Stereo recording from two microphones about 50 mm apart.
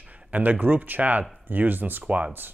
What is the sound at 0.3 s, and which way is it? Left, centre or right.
Speech, right.